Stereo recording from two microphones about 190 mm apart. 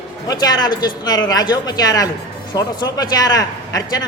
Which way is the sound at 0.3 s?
20° left (ahead or behind).